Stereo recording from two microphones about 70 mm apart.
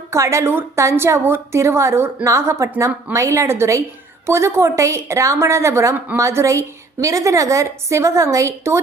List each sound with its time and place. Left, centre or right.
0.1 s a woman's voice: right